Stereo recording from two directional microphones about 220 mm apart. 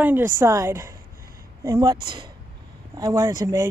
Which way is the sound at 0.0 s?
10° right (ahead or behind).